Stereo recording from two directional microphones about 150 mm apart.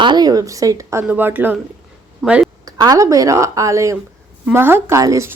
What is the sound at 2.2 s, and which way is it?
Quack, 5° right (ahead or behind).